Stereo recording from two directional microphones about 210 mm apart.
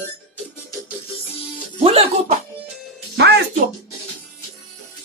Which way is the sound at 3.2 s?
50° right (ahead or behind).